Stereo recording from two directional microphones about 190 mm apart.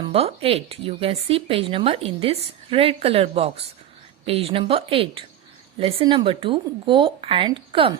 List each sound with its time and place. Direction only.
0.0 s speech: 30° right (ahead or behind)